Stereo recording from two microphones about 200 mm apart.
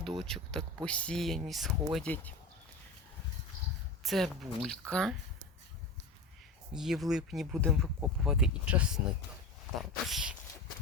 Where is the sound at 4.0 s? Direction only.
Centre (ahead or behind).